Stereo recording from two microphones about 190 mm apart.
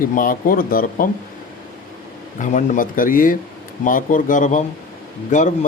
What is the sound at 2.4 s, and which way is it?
A man's voice, 40° left (ahead or behind).